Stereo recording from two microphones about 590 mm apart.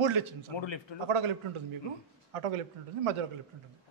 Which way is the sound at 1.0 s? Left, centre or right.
Right.